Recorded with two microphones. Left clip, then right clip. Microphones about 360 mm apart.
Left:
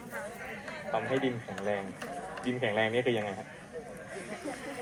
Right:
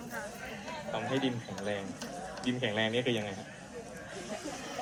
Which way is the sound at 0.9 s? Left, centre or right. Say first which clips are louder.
Left 3 dB; centre.